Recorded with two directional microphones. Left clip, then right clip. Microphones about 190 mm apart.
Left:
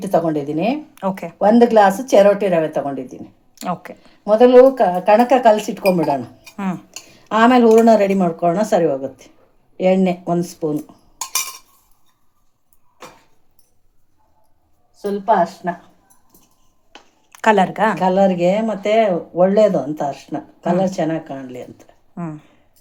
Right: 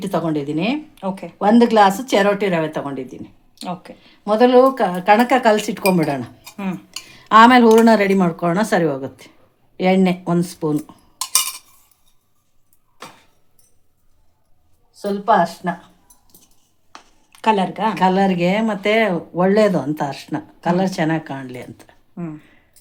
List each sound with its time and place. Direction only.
0.0 s speech: 20° right (ahead or behind)
0.9 s speech: 15° left (ahead or behind)
1.4 s speech: 25° right (ahead or behind)
3.6 s speech: 15° left (ahead or behind)
4.3 s speech: 25° right (ahead or behind)
7.6 s speech: 45° right (ahead or behind)
7.9 s speech: 25° right (ahead or behind)
15.6 s speech: 45° right (ahead or behind)
17.3 s speech: 10° left (ahead or behind)
17.9 s speech: 30° right (ahead or behind)
22.1 s speech: 5° left (ahead or behind)